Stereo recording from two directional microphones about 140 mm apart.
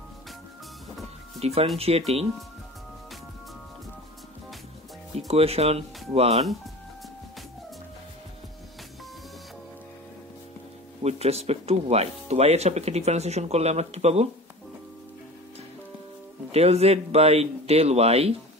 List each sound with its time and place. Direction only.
1.4 s speech: 45° right (ahead or behind)
5.1 s speech: 45° right (ahead or behind)
11.0 s speech: 50° right (ahead or behind)
16.5 s speech: 50° right (ahead or behind)